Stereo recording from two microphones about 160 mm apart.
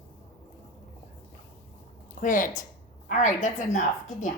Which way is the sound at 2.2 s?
55° left (ahead or behind).